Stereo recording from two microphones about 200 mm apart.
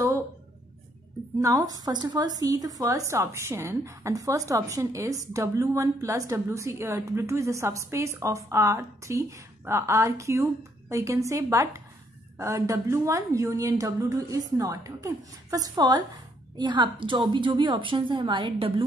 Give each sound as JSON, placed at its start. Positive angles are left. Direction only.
{"t": 1.4, "sound": "a woman's voice", "side_deg": -15}